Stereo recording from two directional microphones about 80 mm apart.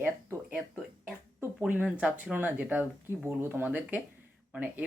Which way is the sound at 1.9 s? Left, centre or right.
Centre.